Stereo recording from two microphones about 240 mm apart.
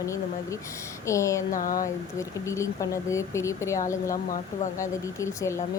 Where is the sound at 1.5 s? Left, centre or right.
Left.